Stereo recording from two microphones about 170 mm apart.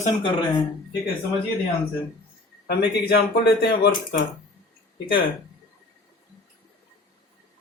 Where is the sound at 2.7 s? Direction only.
70° left (ahead or behind).